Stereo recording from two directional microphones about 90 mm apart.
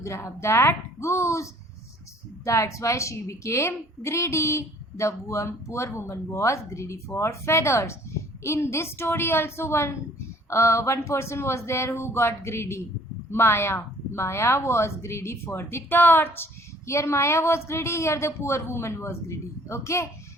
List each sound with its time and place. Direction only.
0.0 s a woman's voice: 30° left (ahead or behind)